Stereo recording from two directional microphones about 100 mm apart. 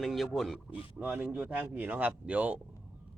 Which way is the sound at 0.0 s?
Centre (ahead or behind).